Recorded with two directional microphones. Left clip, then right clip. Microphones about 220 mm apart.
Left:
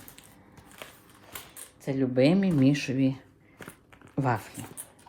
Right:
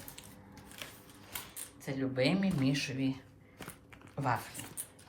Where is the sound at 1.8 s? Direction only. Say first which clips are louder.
Left 8 dB; 45° left (ahead or behind).